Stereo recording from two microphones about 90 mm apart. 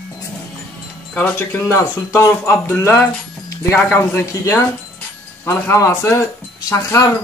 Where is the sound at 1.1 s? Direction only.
20° left (ahead or behind).